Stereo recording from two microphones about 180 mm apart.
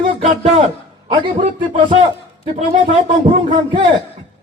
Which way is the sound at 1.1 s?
25° right (ahead or behind).